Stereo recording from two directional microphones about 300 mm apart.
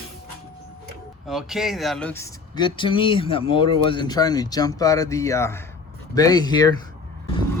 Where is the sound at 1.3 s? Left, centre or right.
Centre.